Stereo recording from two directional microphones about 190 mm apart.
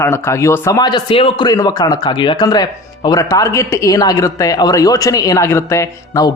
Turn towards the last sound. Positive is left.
turn(degrees=15)  # may be behind; listen again after turning